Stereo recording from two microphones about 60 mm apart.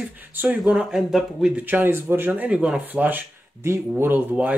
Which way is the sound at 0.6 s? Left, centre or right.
Centre.